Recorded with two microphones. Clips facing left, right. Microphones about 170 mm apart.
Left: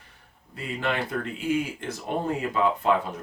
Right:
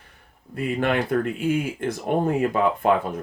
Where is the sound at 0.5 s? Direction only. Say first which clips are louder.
Right 6 dB; 55° right (ahead or behind).